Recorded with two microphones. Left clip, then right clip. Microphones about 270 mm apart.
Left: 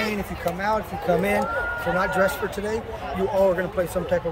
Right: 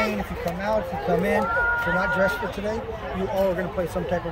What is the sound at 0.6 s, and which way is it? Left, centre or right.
A man's voice, centre.